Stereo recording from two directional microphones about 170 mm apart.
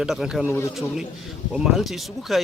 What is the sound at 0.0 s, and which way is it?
Speech, centre (ahead or behind).